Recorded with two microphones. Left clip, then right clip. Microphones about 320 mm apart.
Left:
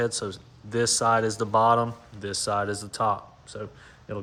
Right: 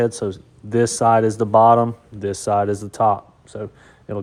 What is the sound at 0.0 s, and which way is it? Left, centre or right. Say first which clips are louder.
Speech: right 7 dB; centre.